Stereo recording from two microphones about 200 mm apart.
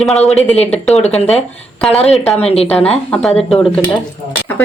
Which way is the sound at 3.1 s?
Centre (ahead or behind).